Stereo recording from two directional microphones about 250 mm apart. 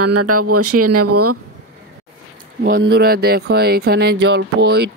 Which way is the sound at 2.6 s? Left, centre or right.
Right.